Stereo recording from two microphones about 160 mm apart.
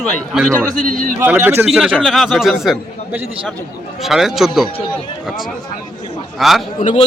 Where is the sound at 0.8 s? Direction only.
55° right (ahead or behind).